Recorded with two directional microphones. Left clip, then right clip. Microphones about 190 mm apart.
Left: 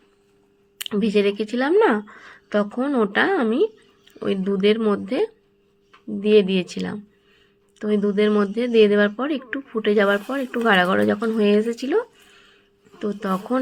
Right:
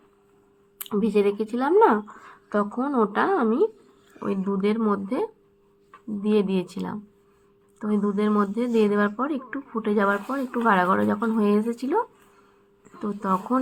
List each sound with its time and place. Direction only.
0.8 s speech: 25° left (ahead or behind)
13.0 s speech: 35° left (ahead or behind)